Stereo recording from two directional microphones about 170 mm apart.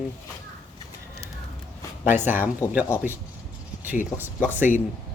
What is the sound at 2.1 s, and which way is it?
Speech, 10° right (ahead or behind).